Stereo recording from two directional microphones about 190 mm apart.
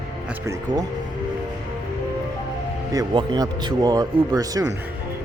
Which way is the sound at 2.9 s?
20° right (ahead or behind).